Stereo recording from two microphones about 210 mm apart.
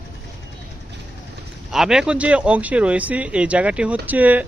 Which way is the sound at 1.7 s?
5° right (ahead or behind).